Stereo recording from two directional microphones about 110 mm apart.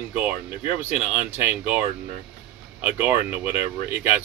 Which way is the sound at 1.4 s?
15° right (ahead or behind).